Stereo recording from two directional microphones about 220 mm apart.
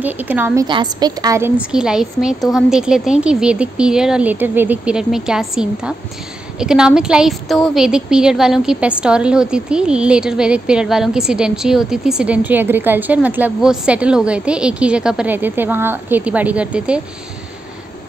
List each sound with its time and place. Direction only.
0.0 s a woman's voice: 10° right (ahead or behind)
0.7 s speech: 20° right (ahead or behind)